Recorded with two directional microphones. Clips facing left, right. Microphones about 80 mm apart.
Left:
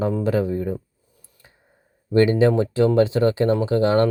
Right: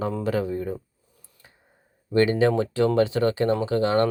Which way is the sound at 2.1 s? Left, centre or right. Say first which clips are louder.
Left 3 dB; left.